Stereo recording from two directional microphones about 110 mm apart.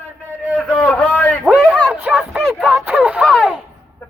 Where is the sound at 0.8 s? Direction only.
10° left (ahead or behind).